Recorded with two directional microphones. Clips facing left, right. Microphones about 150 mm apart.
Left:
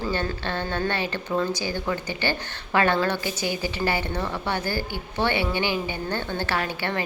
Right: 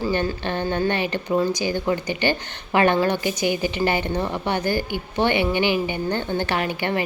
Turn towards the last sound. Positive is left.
turn(degrees=-15)  # may be behind; listen again after turning